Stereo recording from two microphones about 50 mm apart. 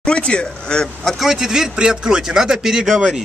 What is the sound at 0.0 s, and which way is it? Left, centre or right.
Speech, centre.